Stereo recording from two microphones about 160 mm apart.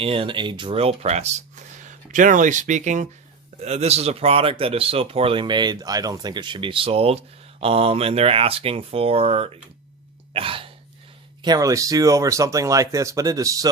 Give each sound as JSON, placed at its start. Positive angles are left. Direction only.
{"t": 0.0, "sound": "speech", "side_deg": -35}
{"t": 10.3, "sound": "a sound", "side_deg": -35}
{"t": 11.4, "sound": "speech", "side_deg": -20}